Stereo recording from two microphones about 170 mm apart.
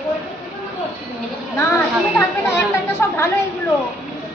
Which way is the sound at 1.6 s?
15° left (ahead or behind).